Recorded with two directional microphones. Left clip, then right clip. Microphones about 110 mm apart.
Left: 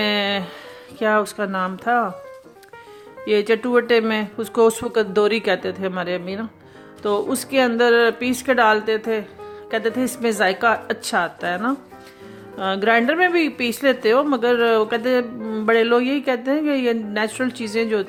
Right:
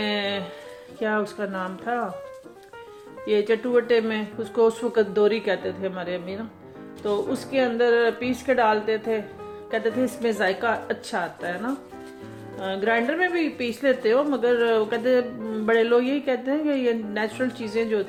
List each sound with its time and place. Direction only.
0.0 s music: 80° left
0.9 s speech: 90° left
3.2 s speech: 75° left (ahead or behind)